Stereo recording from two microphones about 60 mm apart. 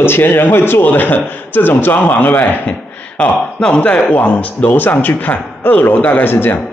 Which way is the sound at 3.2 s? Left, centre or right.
Centre.